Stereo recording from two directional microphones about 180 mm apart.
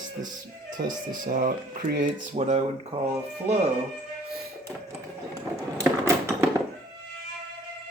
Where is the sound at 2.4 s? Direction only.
40° right (ahead or behind).